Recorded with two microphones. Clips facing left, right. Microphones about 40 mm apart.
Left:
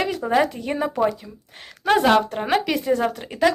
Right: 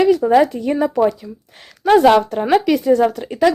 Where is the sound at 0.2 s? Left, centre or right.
Centre.